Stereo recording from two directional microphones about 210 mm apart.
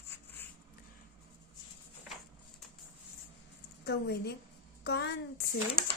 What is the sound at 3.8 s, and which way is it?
A child's voice, 50° left (ahead or behind).